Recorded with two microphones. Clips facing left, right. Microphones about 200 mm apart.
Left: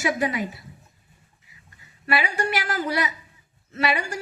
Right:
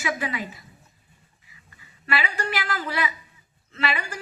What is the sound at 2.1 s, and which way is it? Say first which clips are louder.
A woman's voice: left 3 dB; 45° left (ahead or behind).